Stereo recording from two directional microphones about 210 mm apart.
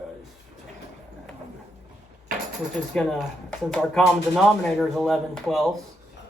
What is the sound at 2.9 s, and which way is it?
Speech, 5° left (ahead or behind).